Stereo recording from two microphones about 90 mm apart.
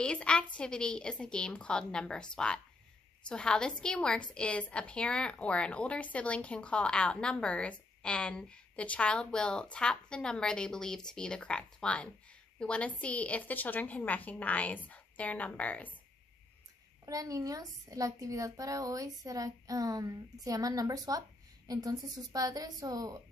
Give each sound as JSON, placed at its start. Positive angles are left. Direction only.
{"t": 0.0, "sound": "a woman's voice", "side_deg": 10}
{"t": 17.0, "sound": "a woman's voice", "side_deg": -40}